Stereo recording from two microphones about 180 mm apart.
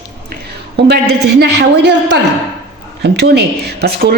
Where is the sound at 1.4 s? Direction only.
70° right (ahead or behind).